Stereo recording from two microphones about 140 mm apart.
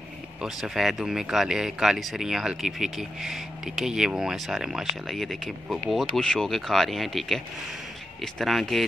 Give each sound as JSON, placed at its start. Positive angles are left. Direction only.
{"t": 0.4, "sound": "speech", "side_deg": 0}